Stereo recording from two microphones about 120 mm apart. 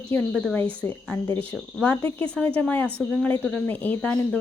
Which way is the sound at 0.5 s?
10° left (ahead or behind).